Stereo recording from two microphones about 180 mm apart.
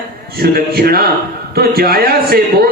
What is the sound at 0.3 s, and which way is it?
A man's voice, 60° right (ahead or behind).